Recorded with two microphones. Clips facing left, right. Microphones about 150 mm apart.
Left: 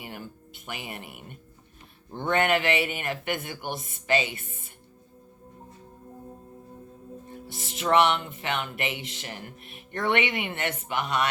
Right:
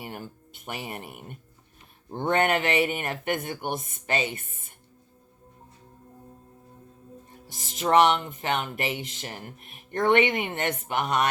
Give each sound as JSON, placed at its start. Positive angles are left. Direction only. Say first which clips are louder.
{"t": 0.0, "sound": "speech", "louder": "right 2 dB", "side_deg": -40}
{"t": 7.5, "sound": "speech", "louder": "right 2 dB", "side_deg": -40}